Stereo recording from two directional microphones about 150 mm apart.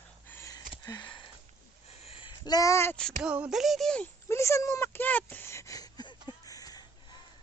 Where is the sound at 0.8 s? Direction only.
30° left (ahead or behind).